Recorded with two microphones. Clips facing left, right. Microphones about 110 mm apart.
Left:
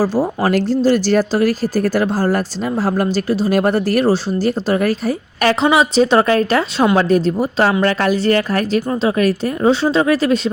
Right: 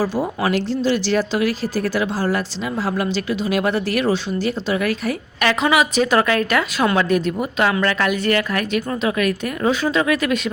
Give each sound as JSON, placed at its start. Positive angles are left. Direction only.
{"t": 0.0, "sound": "speech", "side_deg": 40}